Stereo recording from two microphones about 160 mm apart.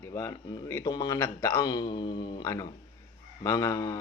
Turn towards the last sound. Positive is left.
turn(degrees=20)  # may be behind; listen again after turning